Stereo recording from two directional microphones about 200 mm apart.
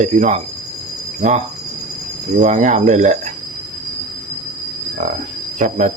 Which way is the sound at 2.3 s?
40° right (ahead or behind).